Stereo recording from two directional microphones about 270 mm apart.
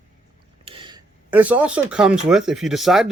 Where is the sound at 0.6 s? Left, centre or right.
Centre.